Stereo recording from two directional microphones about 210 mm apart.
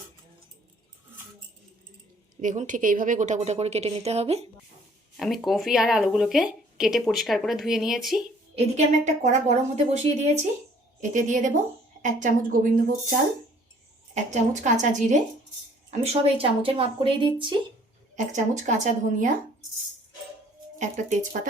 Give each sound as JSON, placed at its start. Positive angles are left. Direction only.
{"t": 2.4, "sound": "a woman's voice", "side_deg": -40}
{"t": 5.1, "sound": "speech", "side_deg": 0}
{"t": 8.5, "sound": "a woman's voice", "side_deg": -35}
{"t": 18.3, "sound": "a woman's voice", "side_deg": -35}
{"t": 20.7, "sound": "a woman's voice", "side_deg": -35}